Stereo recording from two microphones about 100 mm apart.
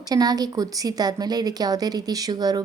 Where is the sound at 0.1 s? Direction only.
40° right (ahead or behind).